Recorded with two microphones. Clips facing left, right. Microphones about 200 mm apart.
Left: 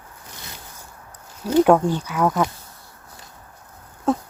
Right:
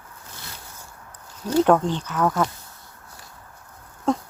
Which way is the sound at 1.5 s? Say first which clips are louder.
Left 3 dB; 10° left (ahead or behind).